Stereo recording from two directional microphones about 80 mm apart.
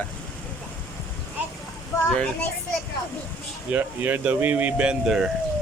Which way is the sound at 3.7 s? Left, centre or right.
Right.